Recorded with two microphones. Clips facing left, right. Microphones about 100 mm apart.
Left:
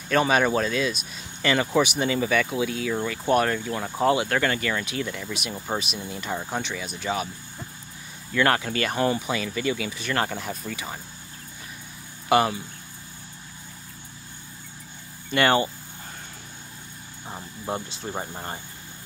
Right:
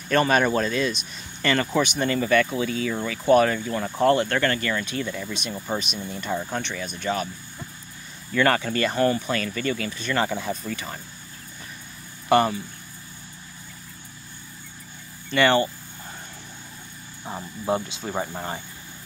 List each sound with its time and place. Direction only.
0.1 s speech: centre (ahead or behind)
8.4 s speech: 5° left (ahead or behind)
12.3 s speech: 5° left (ahead or behind)
15.3 s speech: 15° left (ahead or behind)
17.3 s speech: 15° right (ahead or behind)